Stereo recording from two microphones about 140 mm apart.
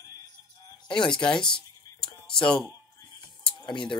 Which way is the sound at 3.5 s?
30° left (ahead or behind).